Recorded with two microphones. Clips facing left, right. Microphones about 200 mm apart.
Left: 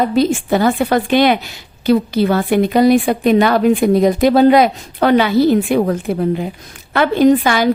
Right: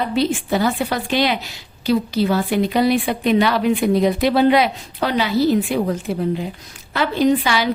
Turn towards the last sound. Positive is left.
turn(degrees=50)  # may be behind; listen again after turning